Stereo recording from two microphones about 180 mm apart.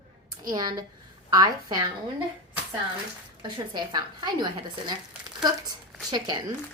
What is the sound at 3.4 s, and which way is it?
Speech, 25° right (ahead or behind).